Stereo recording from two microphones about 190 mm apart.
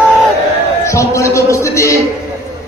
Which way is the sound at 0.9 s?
15° left (ahead or behind).